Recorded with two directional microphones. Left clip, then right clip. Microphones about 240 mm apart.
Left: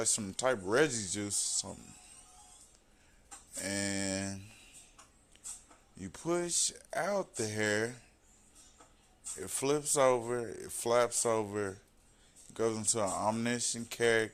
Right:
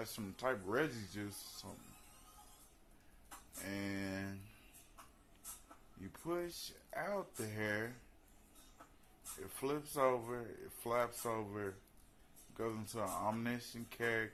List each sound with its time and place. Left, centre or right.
0.0 s speech: left
3.6 s speech: left
6.0 s speech: left
9.4 s speech: left